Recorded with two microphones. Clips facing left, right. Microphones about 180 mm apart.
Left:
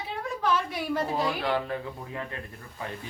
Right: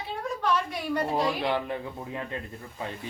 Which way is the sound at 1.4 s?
20° right (ahead or behind).